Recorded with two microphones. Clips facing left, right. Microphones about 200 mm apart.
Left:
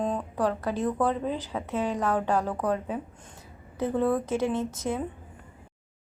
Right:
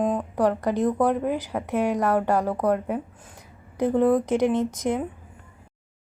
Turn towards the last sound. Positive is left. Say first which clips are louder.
# right 5 dB
turn(degrees=-15)  # may be behind; listen again after turning